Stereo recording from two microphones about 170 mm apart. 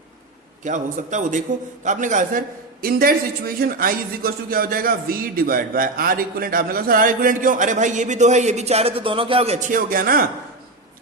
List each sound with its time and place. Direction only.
0.6 s a man's voice: 50° right (ahead or behind)
2.8 s speech: 60° right (ahead or behind)